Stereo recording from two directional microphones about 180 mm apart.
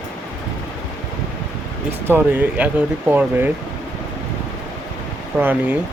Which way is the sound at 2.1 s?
10° right (ahead or behind).